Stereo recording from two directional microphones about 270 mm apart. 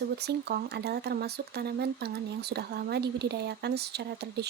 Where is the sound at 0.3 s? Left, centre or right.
Right.